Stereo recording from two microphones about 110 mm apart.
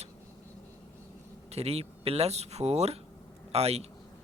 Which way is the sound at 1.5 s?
65° right (ahead or behind).